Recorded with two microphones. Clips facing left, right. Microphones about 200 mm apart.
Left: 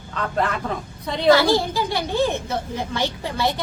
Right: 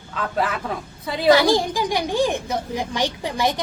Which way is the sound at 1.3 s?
15° right (ahead or behind).